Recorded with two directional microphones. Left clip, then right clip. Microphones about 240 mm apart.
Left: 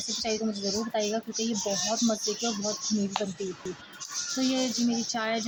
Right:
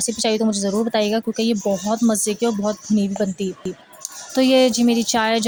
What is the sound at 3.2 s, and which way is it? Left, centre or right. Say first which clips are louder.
Speech: right 10 dB; right.